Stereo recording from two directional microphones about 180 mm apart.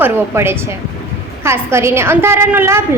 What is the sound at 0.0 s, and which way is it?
A woman's voice, 15° right (ahead or behind).